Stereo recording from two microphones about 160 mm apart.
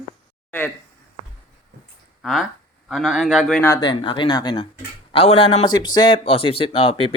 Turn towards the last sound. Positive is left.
turn(degrees=35)  # may be behind; listen again after turning